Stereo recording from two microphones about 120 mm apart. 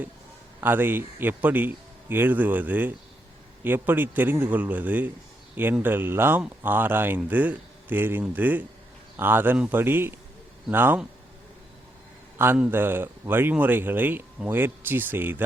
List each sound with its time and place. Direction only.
0.6 s speech: 15° right (ahead or behind)
12.5 s speech: 15° right (ahead or behind)